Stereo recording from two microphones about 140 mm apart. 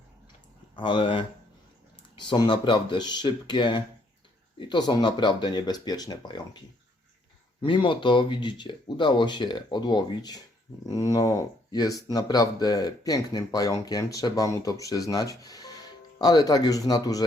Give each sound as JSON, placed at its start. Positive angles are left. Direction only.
{"t": 0.8, "sound": "speech", "side_deg": 35}
{"t": 7.6, "sound": "speech", "side_deg": 35}